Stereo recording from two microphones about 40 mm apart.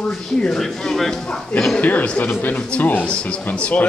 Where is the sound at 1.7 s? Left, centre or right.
Left.